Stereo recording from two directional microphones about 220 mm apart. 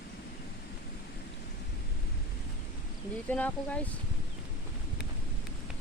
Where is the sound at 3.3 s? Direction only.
5° left (ahead or behind).